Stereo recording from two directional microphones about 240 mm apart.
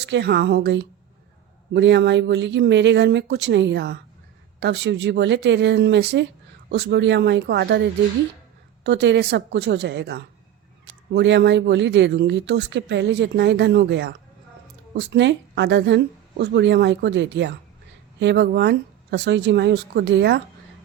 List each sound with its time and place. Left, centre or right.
0.0 s speech: right